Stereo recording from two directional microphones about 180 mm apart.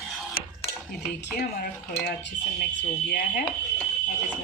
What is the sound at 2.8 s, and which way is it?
Dishes, 60° left (ahead or behind).